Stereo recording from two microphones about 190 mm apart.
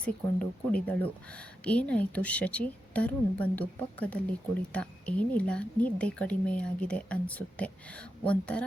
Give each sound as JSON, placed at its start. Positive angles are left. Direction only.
{"t": 0.0, "sound": "speech", "side_deg": 5}